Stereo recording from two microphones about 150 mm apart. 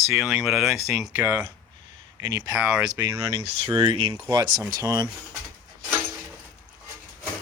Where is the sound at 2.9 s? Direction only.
20° right (ahead or behind).